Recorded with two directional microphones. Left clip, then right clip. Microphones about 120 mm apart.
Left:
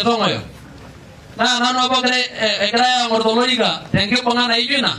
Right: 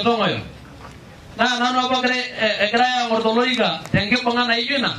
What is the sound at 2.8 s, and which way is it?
Speech, 35° left (ahead or behind).